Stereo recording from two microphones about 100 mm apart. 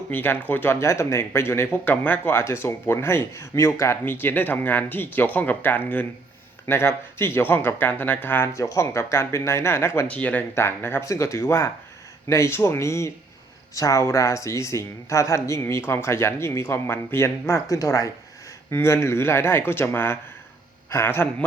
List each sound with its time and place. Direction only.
0.1 s speech: 20° left (ahead or behind)
10.1 s speech: 15° left (ahead or behind)